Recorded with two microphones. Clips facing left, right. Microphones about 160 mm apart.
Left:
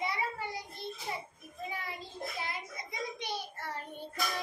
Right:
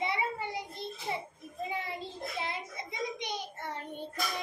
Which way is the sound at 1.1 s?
20° right (ahead or behind).